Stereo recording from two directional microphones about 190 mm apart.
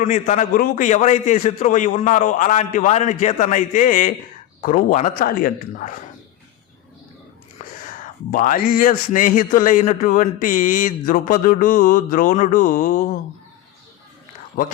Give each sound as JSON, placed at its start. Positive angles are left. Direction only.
{"t": 0.0, "sound": "a man's voice", "side_deg": 40}
{"t": 8.3, "sound": "a man's voice", "side_deg": 50}